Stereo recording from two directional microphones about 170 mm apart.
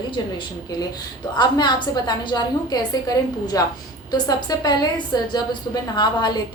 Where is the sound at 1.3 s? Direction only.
25° left (ahead or behind).